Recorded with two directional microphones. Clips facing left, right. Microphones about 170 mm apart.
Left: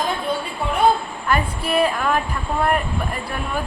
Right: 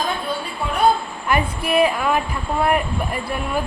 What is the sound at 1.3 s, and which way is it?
Speech, 10° right (ahead or behind).